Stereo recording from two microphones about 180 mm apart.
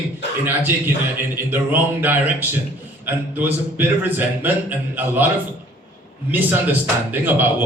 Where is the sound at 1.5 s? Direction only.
10° right (ahead or behind).